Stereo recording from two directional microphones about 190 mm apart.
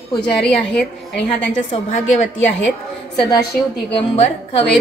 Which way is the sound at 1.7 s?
40° left (ahead or behind).